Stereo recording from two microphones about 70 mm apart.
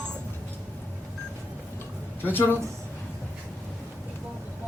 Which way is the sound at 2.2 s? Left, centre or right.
Left.